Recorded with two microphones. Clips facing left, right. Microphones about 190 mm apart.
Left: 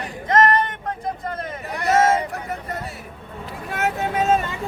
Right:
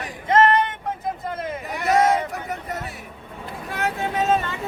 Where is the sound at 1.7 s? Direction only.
Centre (ahead or behind).